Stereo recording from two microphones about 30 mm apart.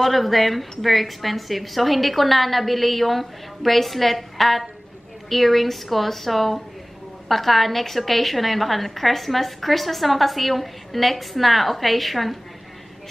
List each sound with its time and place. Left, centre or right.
0.0 s a woman's voice: centre